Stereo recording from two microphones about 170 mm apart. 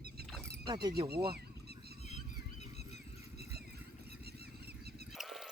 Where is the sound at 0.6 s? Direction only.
25° right (ahead or behind).